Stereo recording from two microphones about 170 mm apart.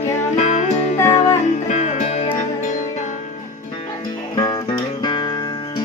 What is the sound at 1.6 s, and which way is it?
Music, 45° left (ahead or behind).